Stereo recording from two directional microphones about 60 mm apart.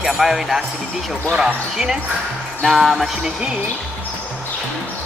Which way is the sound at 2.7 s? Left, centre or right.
Centre.